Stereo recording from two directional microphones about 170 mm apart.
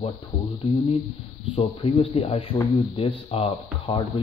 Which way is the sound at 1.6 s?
35° left (ahead or behind).